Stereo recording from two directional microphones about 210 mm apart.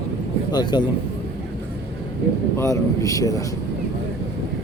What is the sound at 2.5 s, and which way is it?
Speech, 15° left (ahead or behind).